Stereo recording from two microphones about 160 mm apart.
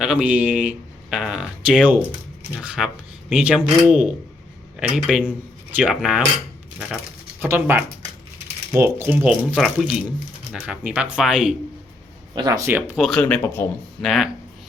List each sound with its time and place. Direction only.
0.0 s speech: 5° right (ahead or behind)
12.3 s speech: 25° right (ahead or behind)
13.1 s a man's voice: 5° left (ahead or behind)
14.0 s speech: centre (ahead or behind)